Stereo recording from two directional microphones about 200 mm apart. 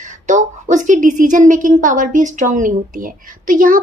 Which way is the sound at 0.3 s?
40° right (ahead or behind).